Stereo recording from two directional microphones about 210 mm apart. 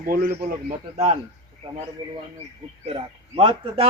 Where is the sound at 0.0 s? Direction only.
45° right (ahead or behind).